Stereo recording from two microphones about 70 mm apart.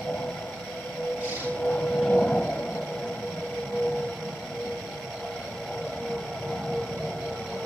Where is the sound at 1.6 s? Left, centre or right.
Centre.